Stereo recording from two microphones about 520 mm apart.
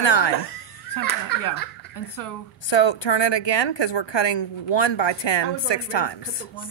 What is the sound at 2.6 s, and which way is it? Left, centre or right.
A woman's voice, left.